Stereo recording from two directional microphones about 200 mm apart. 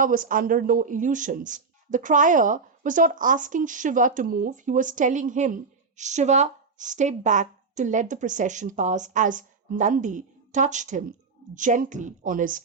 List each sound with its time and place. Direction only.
0.0 s speech: 40° right (ahead or behind)